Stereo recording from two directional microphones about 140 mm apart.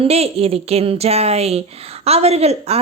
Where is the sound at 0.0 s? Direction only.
45° right (ahead or behind).